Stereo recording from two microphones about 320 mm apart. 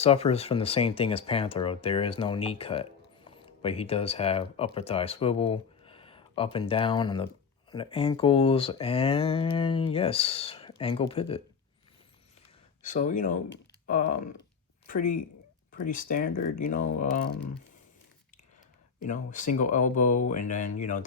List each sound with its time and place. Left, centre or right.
0.0 s speech: centre
12.8 s speech: left
19.0 s speech: left